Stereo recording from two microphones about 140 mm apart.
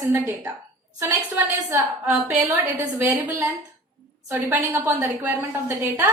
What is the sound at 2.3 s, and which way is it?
A woman's voice, 15° right (ahead or behind).